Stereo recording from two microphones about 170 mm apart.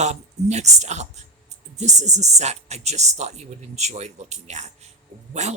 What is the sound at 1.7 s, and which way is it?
Speech, 40° right (ahead or behind).